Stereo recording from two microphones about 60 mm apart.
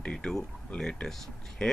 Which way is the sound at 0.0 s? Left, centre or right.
Centre.